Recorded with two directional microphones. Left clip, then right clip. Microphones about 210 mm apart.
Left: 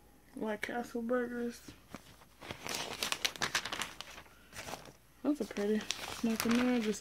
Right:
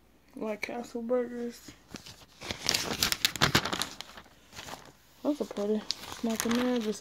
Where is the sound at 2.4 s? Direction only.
35° right (ahead or behind).